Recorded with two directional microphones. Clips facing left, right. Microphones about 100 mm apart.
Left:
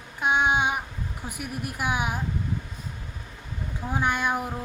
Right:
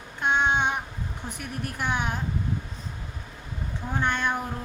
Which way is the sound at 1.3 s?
10° left (ahead or behind).